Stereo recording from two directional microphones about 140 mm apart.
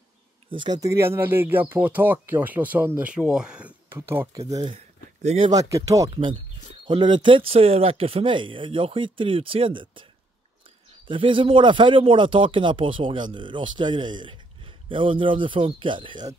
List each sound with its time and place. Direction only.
0.5 s speech: 35° right (ahead or behind)
0.7 s speech: 20° right (ahead or behind)
4.3 s speech: 25° right (ahead or behind)
4.6 s a sound: 50° right (ahead or behind)
5.5 s speech: 25° right (ahead or behind)
6.0 s a man's voice: 40° right (ahead or behind)
11.1 s a man's voice: 40° right (ahead or behind)